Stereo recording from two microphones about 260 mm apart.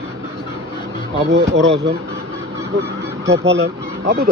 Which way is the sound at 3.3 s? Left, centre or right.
Right.